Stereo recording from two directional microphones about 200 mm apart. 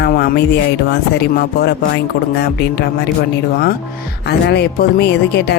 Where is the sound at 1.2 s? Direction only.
55° left (ahead or behind).